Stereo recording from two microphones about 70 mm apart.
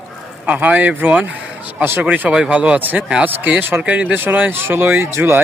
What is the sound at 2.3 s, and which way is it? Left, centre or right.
Speech, centre.